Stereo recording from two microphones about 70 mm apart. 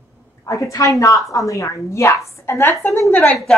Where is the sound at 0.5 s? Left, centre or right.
Left.